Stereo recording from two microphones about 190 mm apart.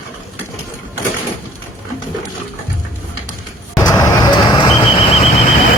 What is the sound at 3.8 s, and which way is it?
Vehicle, 15° left (ahead or behind).